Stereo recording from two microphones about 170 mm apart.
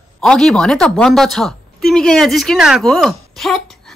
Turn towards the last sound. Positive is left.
turn(degrees=0)  # may be behind; listen again after turning